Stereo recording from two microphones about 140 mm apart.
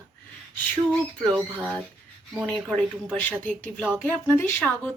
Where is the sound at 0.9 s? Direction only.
5° left (ahead or behind).